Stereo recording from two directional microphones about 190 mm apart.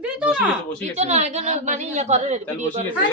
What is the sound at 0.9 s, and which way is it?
A woman's voice, 35° right (ahead or behind).